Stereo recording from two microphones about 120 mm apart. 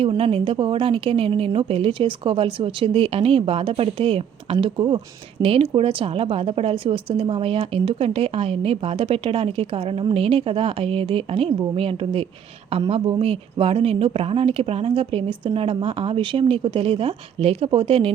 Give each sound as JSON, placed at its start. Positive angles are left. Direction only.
{"t": 0.0, "sound": "a woman's voice", "side_deg": -50}